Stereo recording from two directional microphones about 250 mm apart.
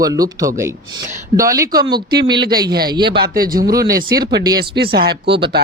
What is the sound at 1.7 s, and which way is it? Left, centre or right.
Speech, right.